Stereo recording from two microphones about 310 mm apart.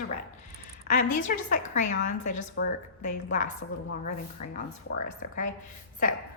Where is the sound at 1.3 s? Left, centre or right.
Left.